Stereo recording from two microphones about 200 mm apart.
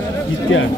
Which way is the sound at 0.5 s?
75° left (ahead or behind).